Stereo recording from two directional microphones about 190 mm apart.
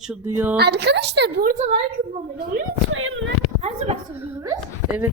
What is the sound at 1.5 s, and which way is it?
Speech, 40° right (ahead or behind).